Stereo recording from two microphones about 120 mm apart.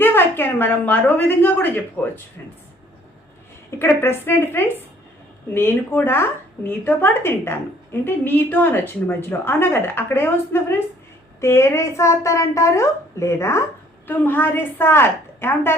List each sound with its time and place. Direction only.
0.0 s a woman's voice: 20° left (ahead or behind)
3.7 s a woman's voice: 20° left (ahead or behind)